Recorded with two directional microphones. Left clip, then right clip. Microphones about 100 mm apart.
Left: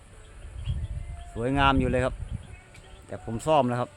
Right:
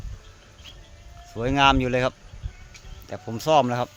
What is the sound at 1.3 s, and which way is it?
Speech, 25° right (ahead or behind).